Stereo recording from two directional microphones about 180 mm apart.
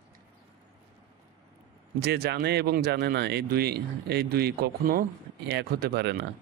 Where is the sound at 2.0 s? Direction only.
65° right (ahead or behind).